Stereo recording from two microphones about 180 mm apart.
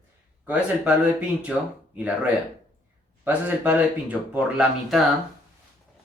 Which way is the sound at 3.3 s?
10° right (ahead or behind).